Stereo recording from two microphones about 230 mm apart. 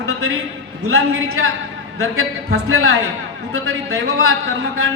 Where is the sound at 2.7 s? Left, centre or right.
Right.